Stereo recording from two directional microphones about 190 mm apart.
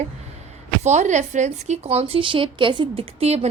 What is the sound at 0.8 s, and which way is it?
A woman's voice, 35° right (ahead or behind).